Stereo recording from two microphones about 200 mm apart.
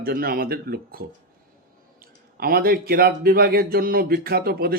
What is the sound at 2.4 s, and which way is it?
Speech, 45° right (ahead or behind).